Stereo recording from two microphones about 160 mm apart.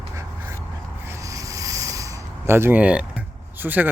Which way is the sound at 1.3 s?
20° right (ahead or behind).